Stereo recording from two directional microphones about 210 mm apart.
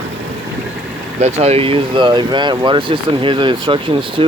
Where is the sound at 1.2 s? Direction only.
30° right (ahead or behind).